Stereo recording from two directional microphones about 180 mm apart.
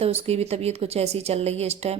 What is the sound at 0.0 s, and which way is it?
Speech, 35° right (ahead or behind).